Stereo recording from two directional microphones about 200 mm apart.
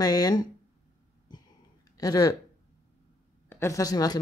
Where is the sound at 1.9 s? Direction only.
20° left (ahead or behind).